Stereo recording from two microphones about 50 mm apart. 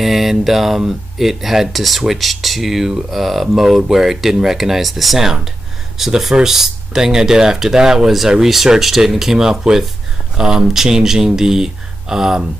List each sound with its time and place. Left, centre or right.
0.0 s speech: centre